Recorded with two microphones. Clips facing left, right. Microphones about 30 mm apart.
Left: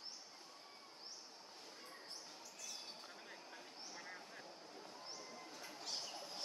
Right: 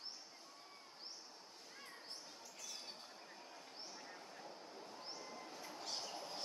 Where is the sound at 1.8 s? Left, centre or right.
Centre.